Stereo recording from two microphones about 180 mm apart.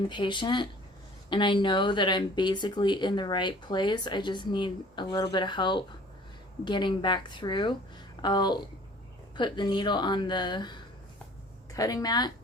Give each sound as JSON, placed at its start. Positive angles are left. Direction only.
{"t": 0.1, "sound": "speech", "side_deg": 25}